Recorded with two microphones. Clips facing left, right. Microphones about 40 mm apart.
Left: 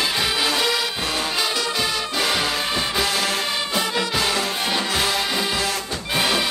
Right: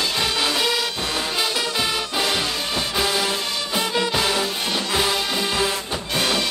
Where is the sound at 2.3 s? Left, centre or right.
Centre.